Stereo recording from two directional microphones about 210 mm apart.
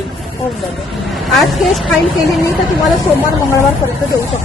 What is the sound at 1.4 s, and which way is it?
A woman's voice, centre (ahead or behind).